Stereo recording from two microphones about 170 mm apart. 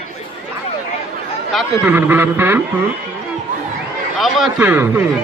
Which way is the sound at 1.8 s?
10° right (ahead or behind).